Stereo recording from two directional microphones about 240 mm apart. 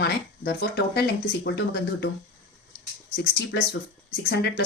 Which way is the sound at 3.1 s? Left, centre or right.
Left.